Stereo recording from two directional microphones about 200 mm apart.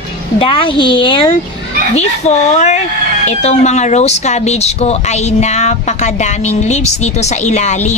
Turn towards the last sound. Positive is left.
turn(degrees=35)  # may be behind; listen again after turning